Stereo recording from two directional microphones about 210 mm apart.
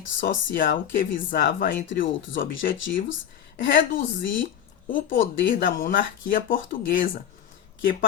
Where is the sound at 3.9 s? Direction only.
60° left (ahead or behind).